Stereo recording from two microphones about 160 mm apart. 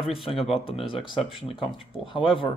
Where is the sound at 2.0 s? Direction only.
30° left (ahead or behind).